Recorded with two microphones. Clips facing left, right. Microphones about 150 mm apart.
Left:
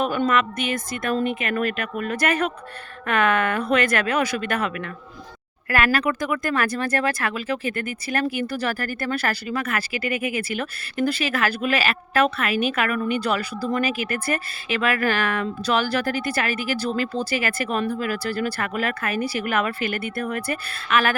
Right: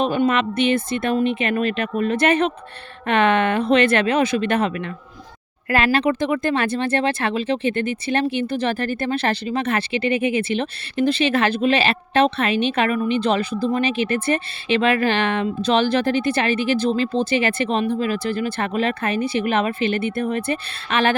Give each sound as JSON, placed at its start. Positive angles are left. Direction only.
{"t": 0.0, "sound": "speech", "side_deg": -25}